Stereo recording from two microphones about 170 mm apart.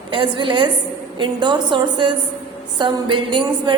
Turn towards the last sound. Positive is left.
turn(degrees=-30)  # may be behind; listen again after turning